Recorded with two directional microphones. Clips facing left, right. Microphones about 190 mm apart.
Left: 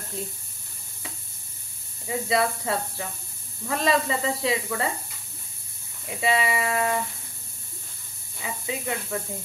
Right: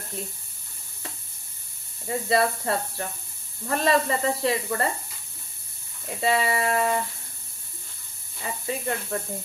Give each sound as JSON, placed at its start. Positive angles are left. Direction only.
{"t": 2.0, "sound": "speech", "side_deg": 0}
{"t": 6.0, "sound": "speech", "side_deg": 0}
{"t": 8.4, "sound": "speech", "side_deg": 5}